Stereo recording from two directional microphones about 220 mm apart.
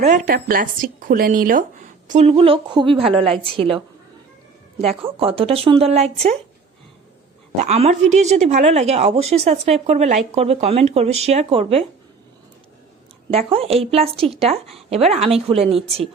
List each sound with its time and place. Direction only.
0.0 s speech: 40° right (ahead or behind)
7.5 s speech: 30° right (ahead or behind)
13.5 s speech: 25° right (ahead or behind)